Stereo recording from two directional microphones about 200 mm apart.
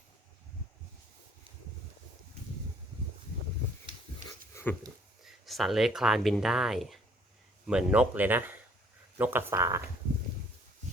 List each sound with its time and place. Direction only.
4.2 s dog: 40° right (ahead or behind)
4.5 s dog: 10° left (ahead or behind)
5.2 s speech: centre (ahead or behind); by 9.8 s 15° right (ahead or behind)